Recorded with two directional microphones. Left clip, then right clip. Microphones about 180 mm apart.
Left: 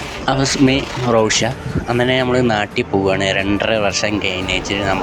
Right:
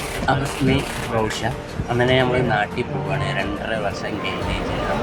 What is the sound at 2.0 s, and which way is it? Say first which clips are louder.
Speech: left 2 dB; 40° left (ahead or behind).